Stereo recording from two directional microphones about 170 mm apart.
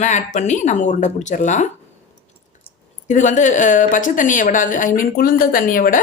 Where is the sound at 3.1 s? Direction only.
45° left (ahead or behind).